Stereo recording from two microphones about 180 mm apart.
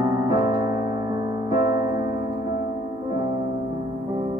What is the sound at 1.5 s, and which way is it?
Piano, 20° right (ahead or behind).